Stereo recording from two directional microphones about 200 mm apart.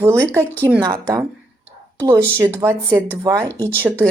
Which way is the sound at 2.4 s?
10° right (ahead or behind).